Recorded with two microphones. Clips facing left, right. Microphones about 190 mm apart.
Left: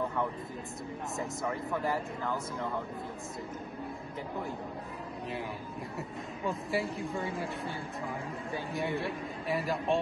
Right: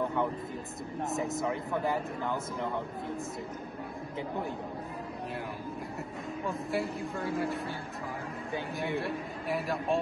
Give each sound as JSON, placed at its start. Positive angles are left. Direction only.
{"t": 1.9, "sound": "speech", "side_deg": -20}
{"t": 6.4, "sound": "a man's voice", "side_deg": 0}
{"t": 8.7, "sound": "a man's voice", "side_deg": 0}